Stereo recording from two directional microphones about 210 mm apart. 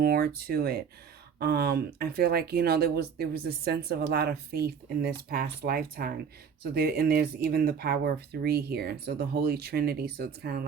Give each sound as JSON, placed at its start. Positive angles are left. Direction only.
{"t": 0.0, "sound": "speech", "side_deg": -45}